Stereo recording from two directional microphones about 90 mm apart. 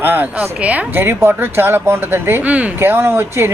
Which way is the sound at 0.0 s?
20° right (ahead or behind).